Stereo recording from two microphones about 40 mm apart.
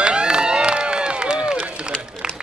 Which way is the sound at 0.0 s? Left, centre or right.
Right.